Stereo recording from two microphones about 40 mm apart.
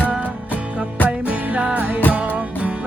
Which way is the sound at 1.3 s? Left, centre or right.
Right.